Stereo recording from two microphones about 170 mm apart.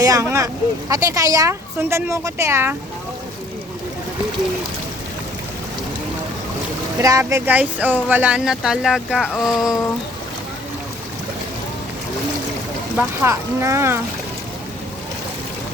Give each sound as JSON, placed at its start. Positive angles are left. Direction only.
{"t": 0.0, "sound": "speech", "side_deg": -20}
{"t": 7.0, "sound": "speech", "side_deg": -20}
{"t": 13.0, "sound": "speech", "side_deg": -15}